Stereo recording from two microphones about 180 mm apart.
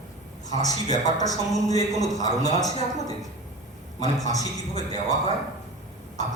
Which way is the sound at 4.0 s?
20° left (ahead or behind).